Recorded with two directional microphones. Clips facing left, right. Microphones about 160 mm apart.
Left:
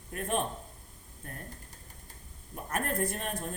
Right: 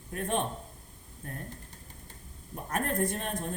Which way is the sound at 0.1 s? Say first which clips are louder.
Right 1 dB; 35° right (ahead or behind).